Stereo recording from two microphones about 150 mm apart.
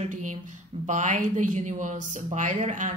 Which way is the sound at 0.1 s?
55° right (ahead or behind).